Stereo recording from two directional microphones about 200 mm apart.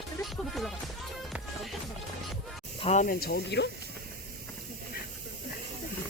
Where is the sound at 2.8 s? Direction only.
40° left (ahead or behind); by 3.7 s 55° left (ahead or behind).